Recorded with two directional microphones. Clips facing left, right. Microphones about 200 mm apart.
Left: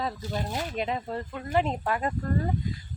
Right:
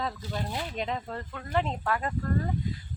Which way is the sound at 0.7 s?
5° left (ahead or behind).